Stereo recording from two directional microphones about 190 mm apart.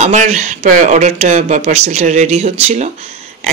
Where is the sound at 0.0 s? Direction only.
40° right (ahead or behind).